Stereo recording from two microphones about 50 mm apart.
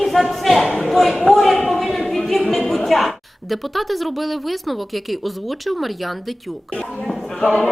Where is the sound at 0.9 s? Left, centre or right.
Centre.